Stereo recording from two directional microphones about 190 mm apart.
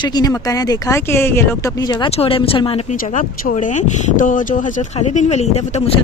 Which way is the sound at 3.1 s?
40° left (ahead or behind).